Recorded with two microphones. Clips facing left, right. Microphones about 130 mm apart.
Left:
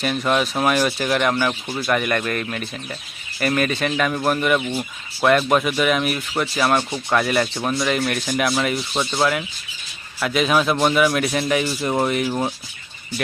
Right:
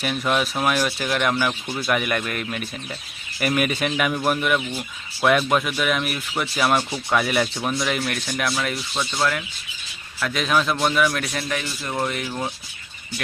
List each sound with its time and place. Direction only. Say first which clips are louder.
0.0 s speech: left 2 dB; centre (ahead or behind)
8.9 s speech: left 4 dB; 25° left (ahead or behind)
10.2 s a man's voice: left 3 dB; 5° left (ahead or behind)
11.3 s speech: left 7 dB; 20° left (ahead or behind)